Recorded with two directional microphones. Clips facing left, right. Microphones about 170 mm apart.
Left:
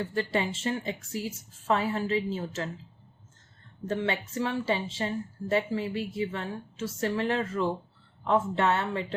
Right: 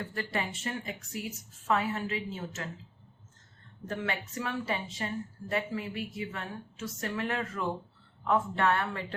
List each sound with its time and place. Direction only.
0.0 s a woman's voice: 25° left (ahead or behind)
3.8 s a woman's voice: 25° left (ahead or behind)